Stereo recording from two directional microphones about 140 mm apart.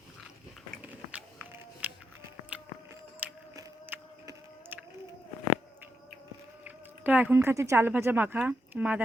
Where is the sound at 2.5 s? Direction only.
10° right (ahead or behind).